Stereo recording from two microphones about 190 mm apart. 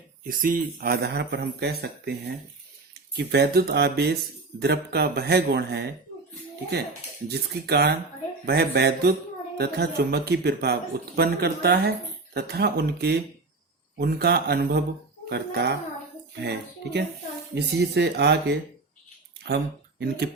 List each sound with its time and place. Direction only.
0.3 s speech: 45° right (ahead or behind); by 2.1 s 60° right (ahead or behind)
3.2 s speech: 60° right (ahead or behind)
7.3 s speech: 60° right (ahead or behind)